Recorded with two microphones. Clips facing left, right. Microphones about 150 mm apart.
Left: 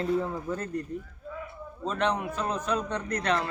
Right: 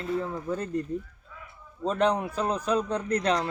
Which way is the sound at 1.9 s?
40° right (ahead or behind).